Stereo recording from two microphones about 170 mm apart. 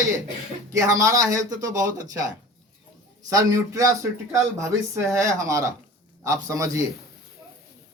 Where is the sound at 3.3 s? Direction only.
20° right (ahead or behind).